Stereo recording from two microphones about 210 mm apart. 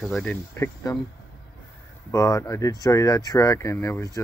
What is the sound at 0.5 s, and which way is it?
Speech, 15° left (ahead or behind).